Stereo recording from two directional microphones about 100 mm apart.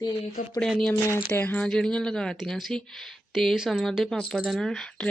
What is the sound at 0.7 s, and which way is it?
Speech, centre (ahead or behind).